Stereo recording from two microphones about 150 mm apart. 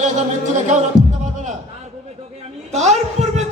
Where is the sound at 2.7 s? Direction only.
50° right (ahead or behind).